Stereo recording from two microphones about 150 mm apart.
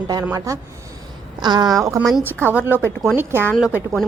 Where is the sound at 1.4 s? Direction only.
30° right (ahead or behind).